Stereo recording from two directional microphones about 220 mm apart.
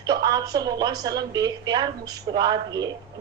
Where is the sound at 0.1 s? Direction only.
15° right (ahead or behind).